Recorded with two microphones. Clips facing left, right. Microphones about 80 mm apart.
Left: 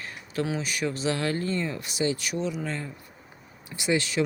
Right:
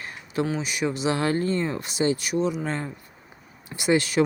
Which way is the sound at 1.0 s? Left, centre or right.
Right.